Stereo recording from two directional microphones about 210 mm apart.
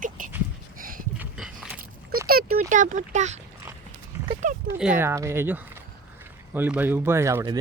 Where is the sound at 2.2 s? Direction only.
45° right (ahead or behind).